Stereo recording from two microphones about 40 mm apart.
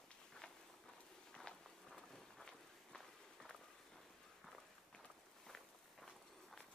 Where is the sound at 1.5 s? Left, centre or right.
Left.